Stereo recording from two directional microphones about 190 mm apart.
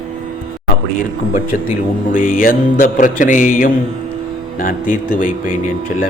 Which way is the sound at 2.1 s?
45° left (ahead or behind).